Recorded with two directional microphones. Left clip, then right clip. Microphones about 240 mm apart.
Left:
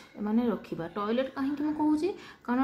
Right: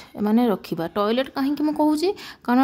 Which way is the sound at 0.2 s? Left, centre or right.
Right.